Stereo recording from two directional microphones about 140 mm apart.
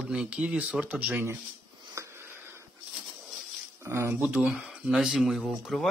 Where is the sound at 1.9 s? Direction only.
20° right (ahead or behind).